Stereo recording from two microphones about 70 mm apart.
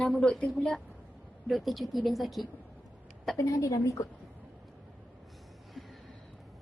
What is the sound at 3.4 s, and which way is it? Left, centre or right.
Speech, left.